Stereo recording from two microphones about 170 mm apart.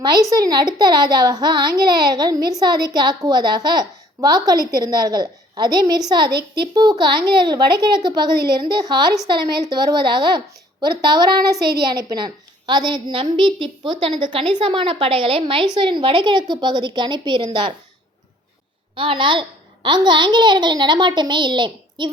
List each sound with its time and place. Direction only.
0.0 s a woman's voice: 20° right (ahead or behind)
18.9 s a woman's voice: 30° right (ahead or behind)